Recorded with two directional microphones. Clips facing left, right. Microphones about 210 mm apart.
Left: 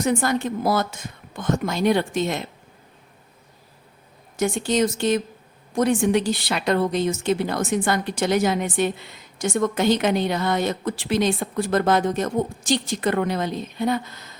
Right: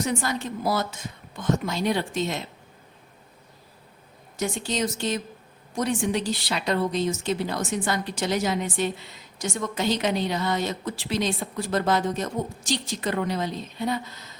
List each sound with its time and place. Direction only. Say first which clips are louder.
0.0 s a woman's voice: left 5 dB; 55° left (ahead or behind)
4.4 s a woman's voice: left 6 dB; 55° left (ahead or behind)